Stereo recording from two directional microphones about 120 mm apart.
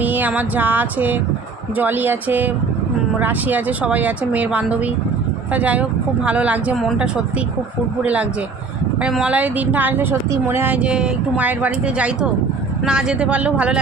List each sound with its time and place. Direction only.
0.0 s speech: 15° right (ahead or behind)
6.7 s speech: centre (ahead or behind)
8.0 s speech: 10° right (ahead or behind)